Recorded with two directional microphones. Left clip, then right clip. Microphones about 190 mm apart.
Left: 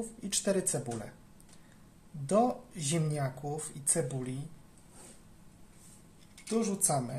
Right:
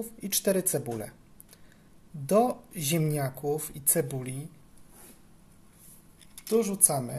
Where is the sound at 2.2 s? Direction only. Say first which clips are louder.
Right 4 dB; 50° right (ahead or behind).